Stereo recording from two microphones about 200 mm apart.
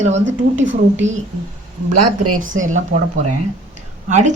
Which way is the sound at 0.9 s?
35° right (ahead or behind).